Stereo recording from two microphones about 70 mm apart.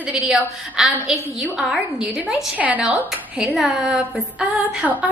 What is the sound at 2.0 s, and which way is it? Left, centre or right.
Speech, centre.